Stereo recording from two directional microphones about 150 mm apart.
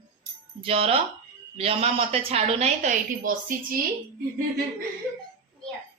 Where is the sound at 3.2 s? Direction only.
70° right (ahead or behind).